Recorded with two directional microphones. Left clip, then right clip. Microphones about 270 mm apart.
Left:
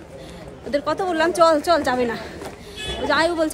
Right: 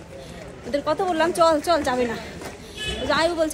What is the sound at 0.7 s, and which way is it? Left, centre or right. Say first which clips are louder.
A woman's voice: left 1 dB; centre.